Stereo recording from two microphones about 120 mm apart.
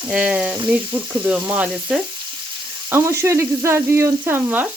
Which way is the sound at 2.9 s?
20° right (ahead or behind).